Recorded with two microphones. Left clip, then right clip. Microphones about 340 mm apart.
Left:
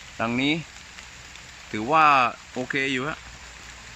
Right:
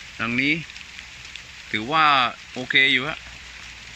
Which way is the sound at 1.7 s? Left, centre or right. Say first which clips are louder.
Even; centre.